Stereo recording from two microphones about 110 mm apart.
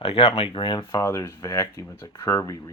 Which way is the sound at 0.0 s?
65° left (ahead or behind).